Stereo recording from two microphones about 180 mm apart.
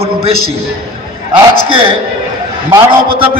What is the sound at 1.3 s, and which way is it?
Speech, 30° right (ahead or behind).